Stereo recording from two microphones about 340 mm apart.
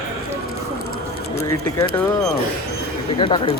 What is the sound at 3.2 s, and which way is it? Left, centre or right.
Speech, centre.